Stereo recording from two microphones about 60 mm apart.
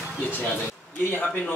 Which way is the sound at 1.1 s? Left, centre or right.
Left.